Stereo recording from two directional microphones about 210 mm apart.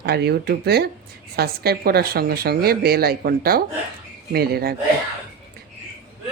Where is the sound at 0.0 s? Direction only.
50° right (ahead or behind).